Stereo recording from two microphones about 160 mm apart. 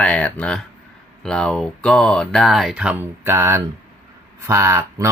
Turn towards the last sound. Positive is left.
turn(degrees=-20)  # may be behind; listen again after turning